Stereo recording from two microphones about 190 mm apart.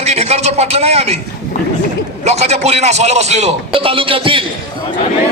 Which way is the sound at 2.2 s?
35° right (ahead or behind).